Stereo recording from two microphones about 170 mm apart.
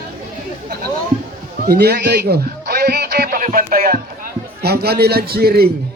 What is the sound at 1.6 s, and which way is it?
A man's voice, 70° right (ahead or behind).